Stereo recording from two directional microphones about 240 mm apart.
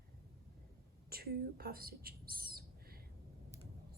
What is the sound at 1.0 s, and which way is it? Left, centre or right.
Speech, right.